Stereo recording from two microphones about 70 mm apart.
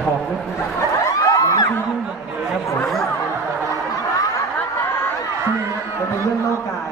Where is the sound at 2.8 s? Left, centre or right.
Centre.